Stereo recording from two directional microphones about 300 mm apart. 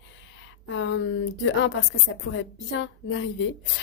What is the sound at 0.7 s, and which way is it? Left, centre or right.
A woman's voice, left.